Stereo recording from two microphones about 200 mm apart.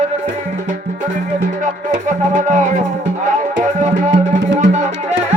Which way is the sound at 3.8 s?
35° right (ahead or behind).